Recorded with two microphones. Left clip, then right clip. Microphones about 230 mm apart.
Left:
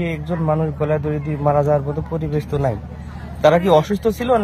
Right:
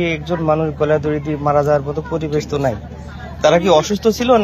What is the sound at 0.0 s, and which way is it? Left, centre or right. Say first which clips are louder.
A man's voice: right 5 dB; left.